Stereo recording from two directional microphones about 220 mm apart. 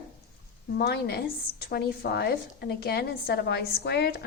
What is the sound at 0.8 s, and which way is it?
A woman's voice, 45° left (ahead or behind).